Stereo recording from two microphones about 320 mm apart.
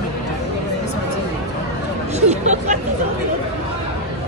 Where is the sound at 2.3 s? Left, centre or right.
Right.